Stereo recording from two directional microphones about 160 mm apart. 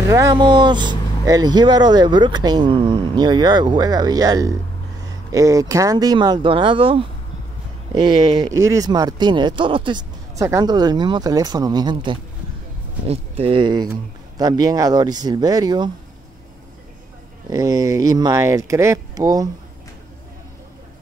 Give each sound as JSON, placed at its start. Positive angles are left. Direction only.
{"t": 0.1, "sound": "speech", "side_deg": -25}
{"t": 13.0, "sound": "speech", "side_deg": -40}
{"t": 17.5, "sound": "speech", "side_deg": -20}